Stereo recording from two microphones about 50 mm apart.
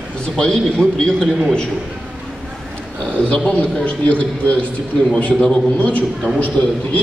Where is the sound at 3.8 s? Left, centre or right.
Left.